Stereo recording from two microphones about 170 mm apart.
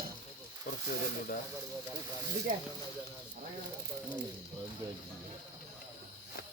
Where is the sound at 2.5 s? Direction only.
50° right (ahead or behind).